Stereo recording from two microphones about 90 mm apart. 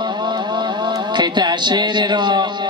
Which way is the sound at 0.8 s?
55° right (ahead or behind).